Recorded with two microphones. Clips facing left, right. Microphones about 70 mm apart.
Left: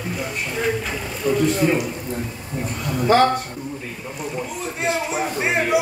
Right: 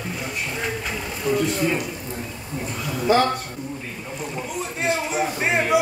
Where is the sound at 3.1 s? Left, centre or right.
Left.